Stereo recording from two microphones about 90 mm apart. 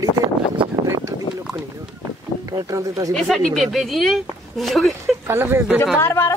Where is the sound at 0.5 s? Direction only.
70° right (ahead or behind).